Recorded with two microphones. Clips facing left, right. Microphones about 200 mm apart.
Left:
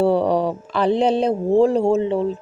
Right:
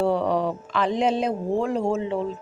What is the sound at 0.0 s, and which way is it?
Speech, 30° left (ahead or behind).